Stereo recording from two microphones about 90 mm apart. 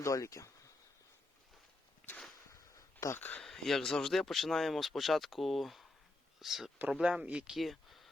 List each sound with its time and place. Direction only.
0.0 s speech: 35° left (ahead or behind)
2.5 s a sound: 35° left (ahead or behind)
3.2 s speech: 20° left (ahead or behind)
3.4 s speech: centre (ahead or behind)